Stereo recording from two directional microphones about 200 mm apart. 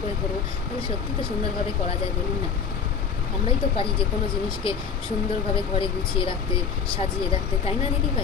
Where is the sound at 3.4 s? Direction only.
25° left (ahead or behind).